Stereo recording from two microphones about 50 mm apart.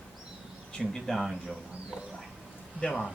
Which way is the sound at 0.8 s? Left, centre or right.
Centre.